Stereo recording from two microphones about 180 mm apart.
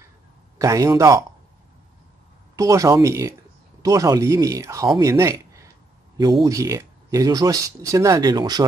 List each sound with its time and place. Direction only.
0.6 s speech: 20° right (ahead or behind)
2.5 s speech: 20° right (ahead or behind)